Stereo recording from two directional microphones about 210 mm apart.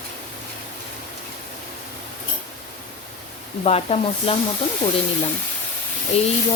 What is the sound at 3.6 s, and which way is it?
Speech, 30° left (ahead or behind).